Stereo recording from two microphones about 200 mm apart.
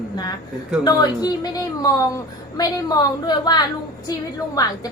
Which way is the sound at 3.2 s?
20° left (ahead or behind).